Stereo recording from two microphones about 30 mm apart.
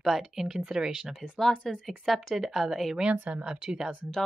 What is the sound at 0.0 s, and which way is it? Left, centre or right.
Speech, centre.